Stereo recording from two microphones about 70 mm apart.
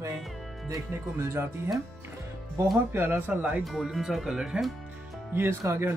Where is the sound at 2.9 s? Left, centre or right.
Right.